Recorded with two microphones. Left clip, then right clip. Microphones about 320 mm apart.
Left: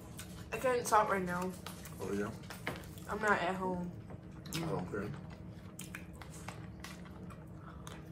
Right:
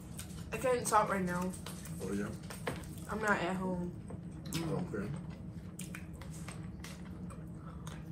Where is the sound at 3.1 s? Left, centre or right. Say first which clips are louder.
Left 1 dB; centre.